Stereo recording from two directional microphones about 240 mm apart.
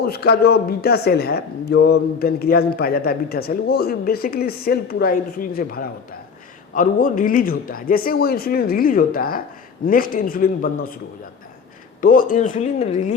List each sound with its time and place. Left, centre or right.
0.0 s speech: left
11.9 s speech: left